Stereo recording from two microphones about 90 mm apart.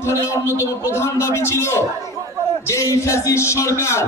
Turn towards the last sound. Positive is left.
turn(degrees=30)  # may be behind; listen again after turning